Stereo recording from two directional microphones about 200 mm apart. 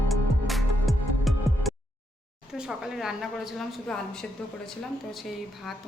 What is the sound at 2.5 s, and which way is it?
A woman's voice, centre (ahead or behind).